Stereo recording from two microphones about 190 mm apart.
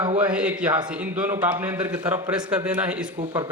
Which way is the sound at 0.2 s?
5° right (ahead or behind).